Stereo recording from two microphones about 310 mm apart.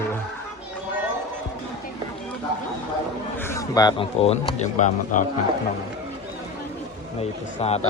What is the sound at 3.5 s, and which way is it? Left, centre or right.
A man's voice, centre.